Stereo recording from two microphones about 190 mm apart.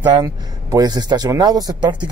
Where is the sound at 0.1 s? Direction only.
20° right (ahead or behind).